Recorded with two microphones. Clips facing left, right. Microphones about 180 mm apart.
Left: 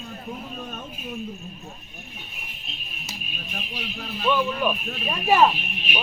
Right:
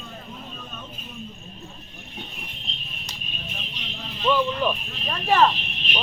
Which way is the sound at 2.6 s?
10° left (ahead or behind).